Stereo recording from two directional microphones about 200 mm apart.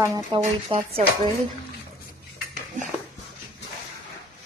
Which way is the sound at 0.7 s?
25° right (ahead or behind).